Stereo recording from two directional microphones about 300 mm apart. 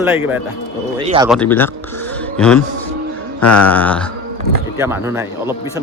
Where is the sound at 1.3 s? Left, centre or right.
Centre.